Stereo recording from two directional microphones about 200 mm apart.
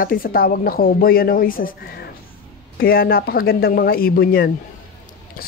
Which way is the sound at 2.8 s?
50° left (ahead or behind).